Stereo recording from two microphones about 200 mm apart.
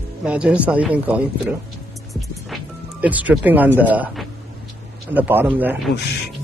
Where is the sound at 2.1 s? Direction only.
5° right (ahead or behind).